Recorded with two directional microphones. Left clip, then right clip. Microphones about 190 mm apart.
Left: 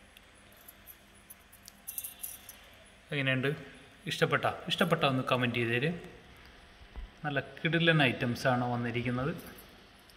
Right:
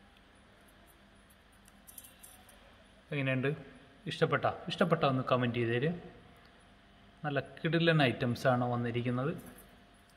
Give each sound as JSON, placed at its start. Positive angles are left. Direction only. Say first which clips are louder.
{"t": 3.1, "sound": "speech", "louder": "left 3 dB", "side_deg": -10}
{"t": 7.2, "sound": "a man's voice", "louder": "left 2 dB", "side_deg": -25}